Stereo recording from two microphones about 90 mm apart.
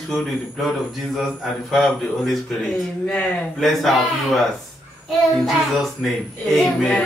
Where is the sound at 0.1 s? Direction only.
5° left (ahead or behind).